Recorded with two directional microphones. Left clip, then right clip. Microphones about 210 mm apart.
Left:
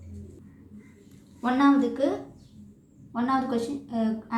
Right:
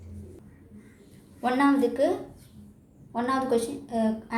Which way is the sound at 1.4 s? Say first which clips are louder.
Left 1 dB; 20° right (ahead or behind).